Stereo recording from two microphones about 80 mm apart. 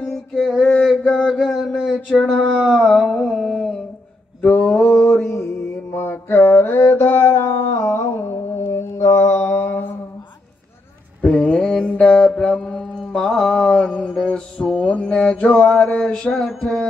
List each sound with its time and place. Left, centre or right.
0.0 s a sound: centre
0.8 s mantra: centre
1.4 s a sound: centre
2.0 s a sound: centre
4.4 s mantra: centre
4.9 s mantra: centre
5.9 s mantra: left
11.2 s mantra: centre
14.1 s music: centre